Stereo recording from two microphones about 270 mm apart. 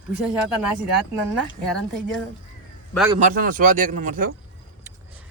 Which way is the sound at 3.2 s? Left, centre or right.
Right.